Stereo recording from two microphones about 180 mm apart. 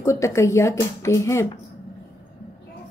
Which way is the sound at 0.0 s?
15° left (ahead or behind).